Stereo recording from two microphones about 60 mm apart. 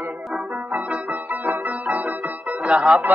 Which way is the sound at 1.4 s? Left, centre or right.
Right.